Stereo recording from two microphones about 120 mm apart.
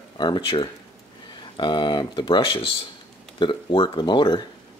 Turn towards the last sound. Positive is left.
turn(degrees=40)  # may be behind; listen again after turning